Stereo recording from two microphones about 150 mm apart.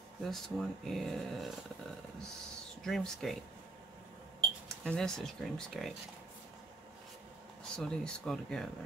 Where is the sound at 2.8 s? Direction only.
Centre (ahead or behind).